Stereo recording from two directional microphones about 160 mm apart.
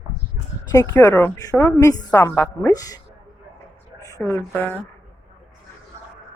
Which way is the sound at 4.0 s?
20° left (ahead or behind).